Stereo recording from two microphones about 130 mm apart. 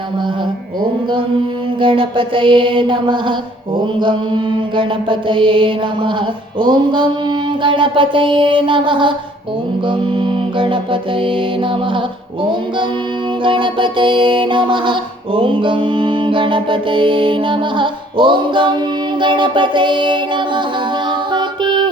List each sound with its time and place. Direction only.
1.8 s music: 40° right (ahead or behind)
13.4 s music: 40° right (ahead or behind)